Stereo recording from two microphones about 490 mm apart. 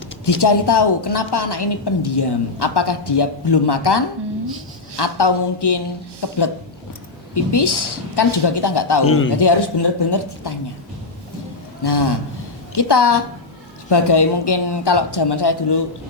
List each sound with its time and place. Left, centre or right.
0.3 s a woman's voice: left
7.5 s a woman's voice: left
9.0 s a man's voice: left
9.3 s a woman's voice: left
11.8 s a woman's voice: left